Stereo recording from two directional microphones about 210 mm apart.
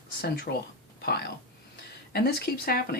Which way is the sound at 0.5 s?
45° left (ahead or behind).